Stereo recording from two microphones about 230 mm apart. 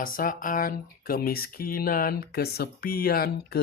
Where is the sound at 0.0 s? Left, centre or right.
Left.